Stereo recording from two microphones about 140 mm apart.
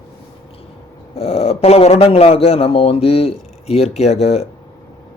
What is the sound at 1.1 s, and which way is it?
Speech, 45° left (ahead or behind).